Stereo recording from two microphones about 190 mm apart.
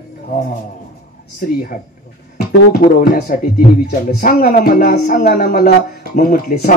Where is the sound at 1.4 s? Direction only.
45° left (ahead or behind).